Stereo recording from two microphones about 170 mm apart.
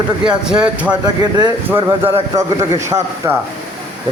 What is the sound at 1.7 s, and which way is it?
Speech, 25° right (ahead or behind).